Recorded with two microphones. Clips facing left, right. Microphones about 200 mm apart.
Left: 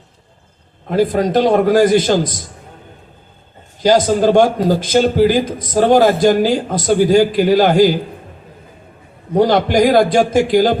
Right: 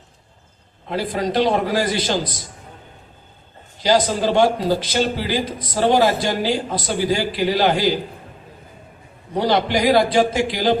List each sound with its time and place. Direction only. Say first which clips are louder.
0.9 s a man's voice: left 8 dB; 45° left (ahead or behind)
3.8 s a man's voice: left 6 dB; 45° left (ahead or behind)
9.3 s a man's voice: left 6 dB; 50° left (ahead or behind)